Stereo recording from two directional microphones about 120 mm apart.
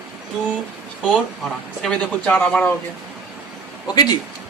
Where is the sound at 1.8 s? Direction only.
10° left (ahead or behind).